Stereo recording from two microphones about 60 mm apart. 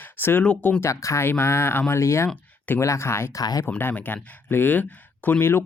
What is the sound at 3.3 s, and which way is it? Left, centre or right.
Speech, left.